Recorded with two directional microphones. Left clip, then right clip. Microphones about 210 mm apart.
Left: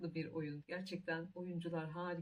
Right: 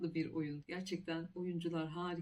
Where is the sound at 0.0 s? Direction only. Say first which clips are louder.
Right 4 dB; 5° right (ahead or behind).